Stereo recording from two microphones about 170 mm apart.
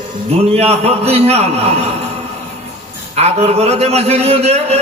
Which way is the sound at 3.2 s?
40° right (ahead or behind).